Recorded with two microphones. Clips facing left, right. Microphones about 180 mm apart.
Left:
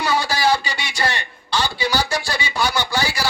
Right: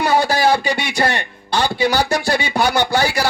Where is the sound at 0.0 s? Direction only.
55° right (ahead or behind).